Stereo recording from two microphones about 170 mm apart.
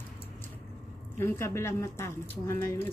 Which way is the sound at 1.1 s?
15° left (ahead or behind).